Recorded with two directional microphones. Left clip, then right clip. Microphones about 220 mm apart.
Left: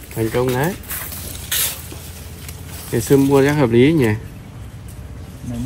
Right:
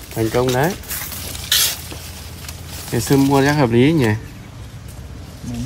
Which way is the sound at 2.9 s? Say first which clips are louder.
Left 2 dB; 45° right (ahead or behind).